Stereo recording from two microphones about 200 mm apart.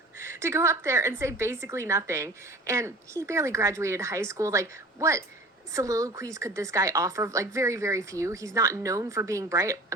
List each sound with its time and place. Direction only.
0.2 s a woman's voice: 15° right (ahead or behind)